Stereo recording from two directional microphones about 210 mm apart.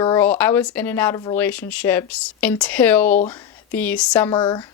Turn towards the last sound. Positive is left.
turn(degrees=20)  # may be behind; listen again after turning